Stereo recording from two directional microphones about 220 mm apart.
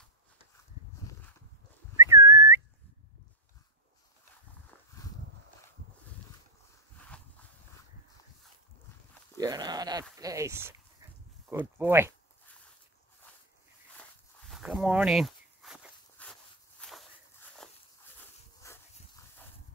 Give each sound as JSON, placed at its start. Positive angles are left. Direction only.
{"t": 2.0, "sound": "whistling", "side_deg": -10}
{"t": 7.1, "sound": "a sound", "side_deg": 5}
{"t": 9.4, "sound": "speech", "side_deg": -20}
{"t": 14.5, "sound": "walk", "side_deg": 0}
{"t": 18.6, "sound": "dog", "side_deg": 15}